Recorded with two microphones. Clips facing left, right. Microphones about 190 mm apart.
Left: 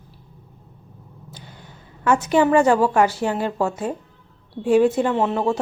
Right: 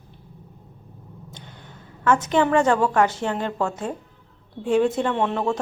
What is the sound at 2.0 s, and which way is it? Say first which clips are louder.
Speech: left 2 dB; 10° left (ahead or behind).